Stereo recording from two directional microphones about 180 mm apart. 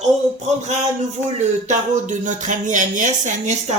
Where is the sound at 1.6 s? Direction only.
45° right (ahead or behind).